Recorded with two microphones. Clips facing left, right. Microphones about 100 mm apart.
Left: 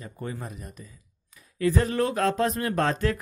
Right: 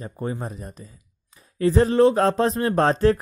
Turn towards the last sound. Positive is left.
turn(degrees=-30)  # may be behind; listen again after turning